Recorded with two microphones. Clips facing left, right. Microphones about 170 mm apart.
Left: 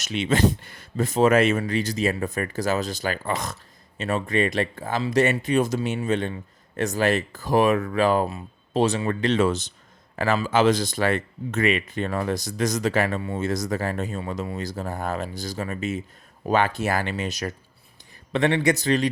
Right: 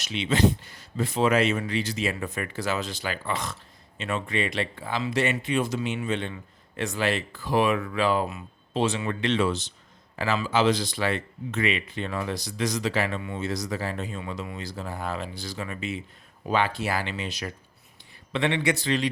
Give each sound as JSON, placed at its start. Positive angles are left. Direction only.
{"t": 0.0, "sound": "speech", "side_deg": 45}